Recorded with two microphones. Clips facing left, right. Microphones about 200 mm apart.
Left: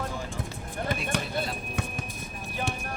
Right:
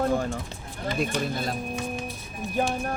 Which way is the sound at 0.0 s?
55° right (ahead or behind).